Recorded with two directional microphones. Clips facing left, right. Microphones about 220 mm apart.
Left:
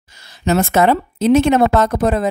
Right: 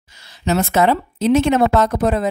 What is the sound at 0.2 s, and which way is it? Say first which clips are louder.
Speech: left 2 dB; 45° left (ahead or behind).